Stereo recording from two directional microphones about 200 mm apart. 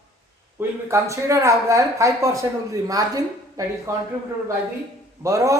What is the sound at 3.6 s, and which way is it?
Speech, 15° right (ahead or behind).